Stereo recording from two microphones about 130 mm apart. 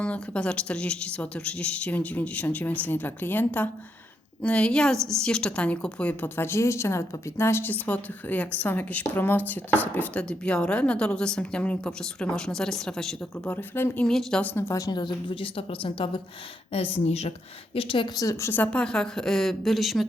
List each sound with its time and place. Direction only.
0.0 s a woman's voice: 10° left (ahead or behind)
14.5 s a woman's voice: 25° left (ahead or behind); by 17.3 s 55° left (ahead or behind)
17.7 s a woman's voice: 40° left (ahead or behind)
18.3 s speech: 20° left (ahead or behind); by 20.1 s centre (ahead or behind)